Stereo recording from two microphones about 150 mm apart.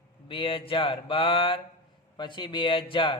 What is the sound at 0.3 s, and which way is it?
A man's voice, 35° left (ahead or behind).